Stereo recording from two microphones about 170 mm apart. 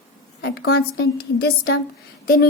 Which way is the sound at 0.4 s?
70° left (ahead or behind).